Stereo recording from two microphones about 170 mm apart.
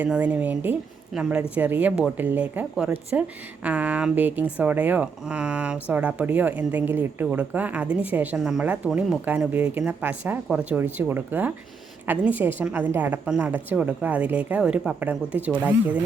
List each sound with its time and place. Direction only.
0.0 s speech: 10° right (ahead or behind)